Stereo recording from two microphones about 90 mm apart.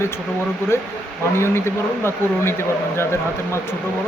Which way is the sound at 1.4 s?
30° left (ahead or behind).